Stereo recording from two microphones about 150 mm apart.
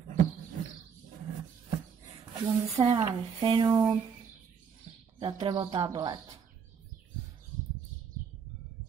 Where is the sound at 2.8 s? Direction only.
30° right (ahead or behind).